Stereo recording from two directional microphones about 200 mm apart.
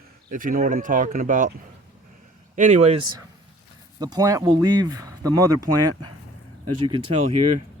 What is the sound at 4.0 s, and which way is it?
Speech, 20° right (ahead or behind).